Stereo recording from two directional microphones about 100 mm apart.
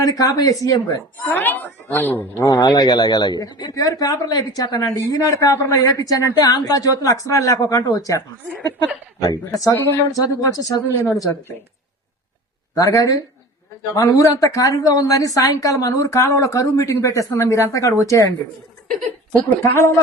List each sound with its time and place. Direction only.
0.0 s speech: 40° left (ahead or behind)
1.2 s a woman's voice: 20° left (ahead or behind)
2.4 s speech: 40° left (ahead or behind)
9.2 s speech: 35° left (ahead or behind)
12.7 s speech: 35° left (ahead or behind)